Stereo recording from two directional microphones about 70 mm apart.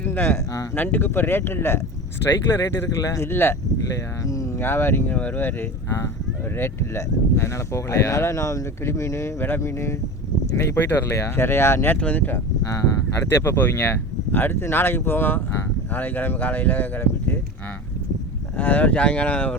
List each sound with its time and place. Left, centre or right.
0.0 s speech: left
3.0 s speech: left
3.2 s speech: left
3.9 s speech: left
4.6 s speech: left
6.6 s speech: left
10.8 s speech: left
11.9 s speech: left
13.4 s speech: left
18.5 s speech: left